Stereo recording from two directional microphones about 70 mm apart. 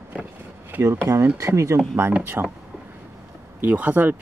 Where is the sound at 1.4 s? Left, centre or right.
Right.